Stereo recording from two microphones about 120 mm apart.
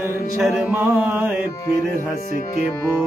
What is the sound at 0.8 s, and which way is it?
Mantra, 20° right (ahead or behind).